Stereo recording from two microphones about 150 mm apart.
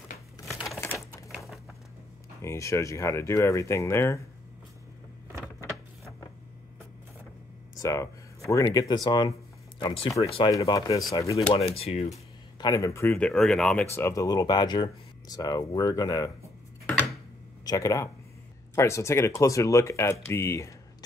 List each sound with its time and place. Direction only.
0.5 s typewriter: centre (ahead or behind)
2.4 s speech: 20° left (ahead or behind)
7.8 s speech: 20° left (ahead or behind)
11.3 s speech: 40° left (ahead or behind)
12.5 s speech: 25° left (ahead or behind)
13.3 s speech: 5° left (ahead or behind)
13.9 s speech: 20° left (ahead or behind)
17.6 s speech: 20° left (ahead or behind)